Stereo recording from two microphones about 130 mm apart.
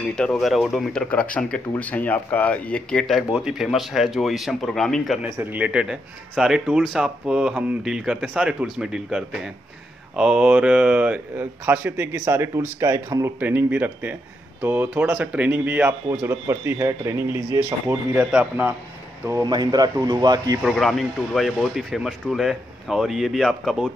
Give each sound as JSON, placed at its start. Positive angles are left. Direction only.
{"t": 0.1, "sound": "speech", "side_deg": 5}
{"t": 5.2, "sound": "speech", "side_deg": -10}
{"t": 18.2, "sound": "speech", "side_deg": -10}
{"t": 19.4, "sound": "a man's voice", "side_deg": -30}
{"t": 20.6, "sound": "speech", "side_deg": 0}